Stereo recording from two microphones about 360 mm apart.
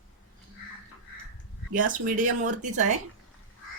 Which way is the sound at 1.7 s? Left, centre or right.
Right.